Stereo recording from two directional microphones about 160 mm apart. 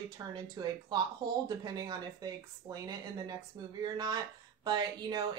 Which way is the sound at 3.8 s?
25° right (ahead or behind).